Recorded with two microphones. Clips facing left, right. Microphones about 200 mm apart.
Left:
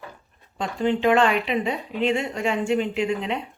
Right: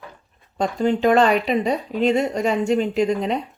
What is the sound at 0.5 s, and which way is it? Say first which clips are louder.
Speech: right 3 dB; 40° right (ahead or behind).